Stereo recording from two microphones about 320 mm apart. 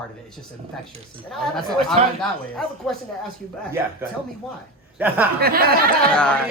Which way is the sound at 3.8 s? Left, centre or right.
Centre.